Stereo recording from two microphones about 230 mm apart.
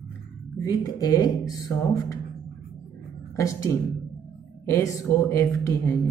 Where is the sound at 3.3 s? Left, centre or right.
Centre.